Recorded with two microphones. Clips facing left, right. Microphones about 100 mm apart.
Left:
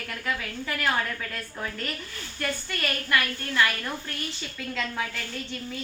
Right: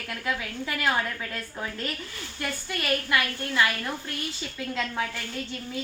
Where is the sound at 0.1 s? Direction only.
10° right (ahead or behind).